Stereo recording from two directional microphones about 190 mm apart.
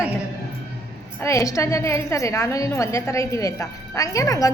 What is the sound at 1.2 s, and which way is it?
A woman's voice, 15° left (ahead or behind).